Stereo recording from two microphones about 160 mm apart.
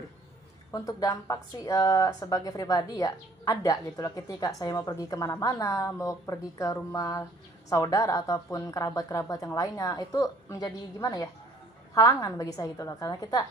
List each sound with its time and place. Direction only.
0.7 s speech: 20° left (ahead or behind)